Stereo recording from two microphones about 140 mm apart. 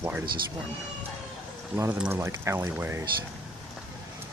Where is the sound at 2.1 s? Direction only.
20° right (ahead or behind).